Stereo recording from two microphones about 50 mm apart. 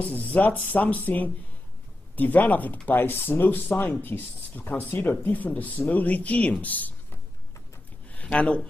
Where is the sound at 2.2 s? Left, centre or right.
Left.